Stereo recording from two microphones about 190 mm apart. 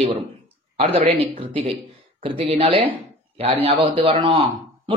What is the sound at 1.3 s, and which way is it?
Speech, 30° right (ahead or behind).